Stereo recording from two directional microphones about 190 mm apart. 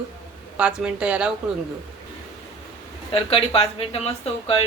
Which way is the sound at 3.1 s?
30° left (ahead or behind).